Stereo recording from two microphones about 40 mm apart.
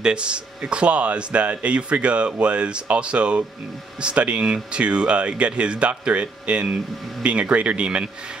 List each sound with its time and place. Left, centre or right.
0.0 s speech: right